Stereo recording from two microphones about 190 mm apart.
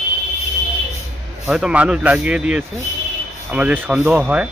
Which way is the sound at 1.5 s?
5° right (ahead or behind).